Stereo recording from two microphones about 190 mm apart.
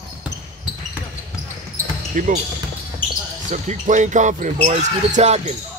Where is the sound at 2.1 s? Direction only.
45° right (ahead or behind).